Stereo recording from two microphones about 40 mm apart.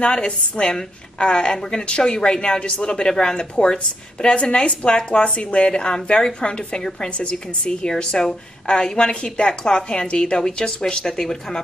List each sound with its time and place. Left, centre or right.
0.0 s a woman's voice: left
6.8 s a woman's voice: centre
7.1 s a woman's voice: left